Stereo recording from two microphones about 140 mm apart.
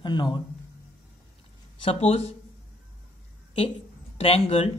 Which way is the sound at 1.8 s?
45° left (ahead or behind).